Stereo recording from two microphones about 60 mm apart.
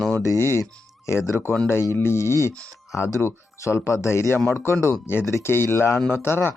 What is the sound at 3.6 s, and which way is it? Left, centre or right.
Speech, left.